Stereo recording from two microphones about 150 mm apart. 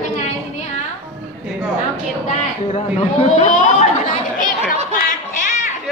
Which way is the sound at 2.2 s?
50° left (ahead or behind).